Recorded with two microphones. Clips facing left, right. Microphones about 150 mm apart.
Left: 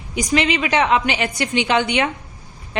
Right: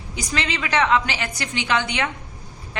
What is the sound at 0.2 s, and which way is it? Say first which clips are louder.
A woman's voice: left 8 dB; 20° left (ahead or behind).